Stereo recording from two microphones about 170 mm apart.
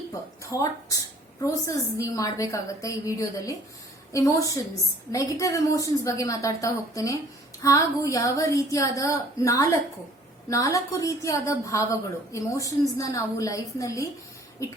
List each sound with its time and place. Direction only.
0.5 s a woman's voice: 20° left (ahead or behind)